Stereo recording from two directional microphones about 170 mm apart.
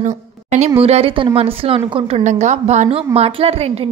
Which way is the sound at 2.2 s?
45° right (ahead or behind).